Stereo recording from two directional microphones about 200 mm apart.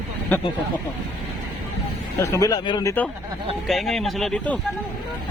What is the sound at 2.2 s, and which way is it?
Speech, 15° left (ahead or behind).